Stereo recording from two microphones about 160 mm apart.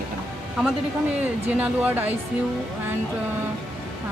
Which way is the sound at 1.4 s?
10° right (ahead or behind).